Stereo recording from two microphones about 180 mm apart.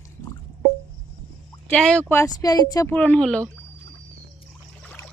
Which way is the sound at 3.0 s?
5° left (ahead or behind).